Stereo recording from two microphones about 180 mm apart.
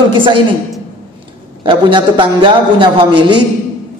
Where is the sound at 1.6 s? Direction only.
25° right (ahead or behind).